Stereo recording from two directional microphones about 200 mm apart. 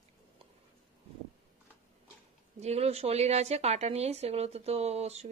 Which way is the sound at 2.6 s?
30° right (ahead or behind).